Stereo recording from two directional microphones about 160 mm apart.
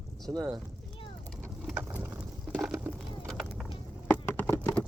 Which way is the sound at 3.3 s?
Centre (ahead or behind).